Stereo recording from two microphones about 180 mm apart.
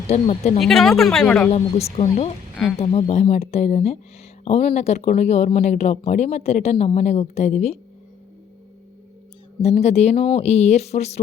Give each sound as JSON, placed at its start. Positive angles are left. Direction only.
{"t": 0.1, "sound": "speech", "side_deg": 35}
{"t": 0.6, "sound": "a woman's voice", "side_deg": 0}
{"t": 1.5, "sound": "speech", "side_deg": 35}
{"t": 9.6, "sound": "speech", "side_deg": 35}